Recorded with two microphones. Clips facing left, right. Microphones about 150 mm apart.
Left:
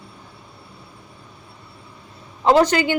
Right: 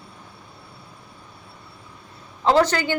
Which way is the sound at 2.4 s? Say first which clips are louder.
Left 3 dB; 15° left (ahead or behind).